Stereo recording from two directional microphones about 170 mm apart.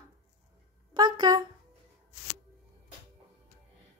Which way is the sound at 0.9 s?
25° right (ahead or behind).